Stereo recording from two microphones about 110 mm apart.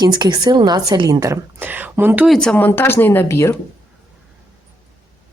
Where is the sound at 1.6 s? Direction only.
15° right (ahead or behind).